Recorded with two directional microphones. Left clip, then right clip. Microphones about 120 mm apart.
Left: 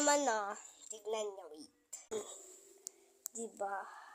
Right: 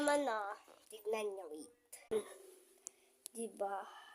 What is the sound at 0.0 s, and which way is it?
Speech, 20° left (ahead or behind).